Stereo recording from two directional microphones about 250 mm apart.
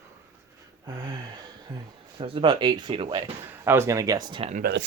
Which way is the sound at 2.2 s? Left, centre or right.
Right.